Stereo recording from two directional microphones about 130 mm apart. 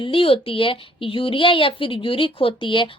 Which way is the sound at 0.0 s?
45° left (ahead or behind).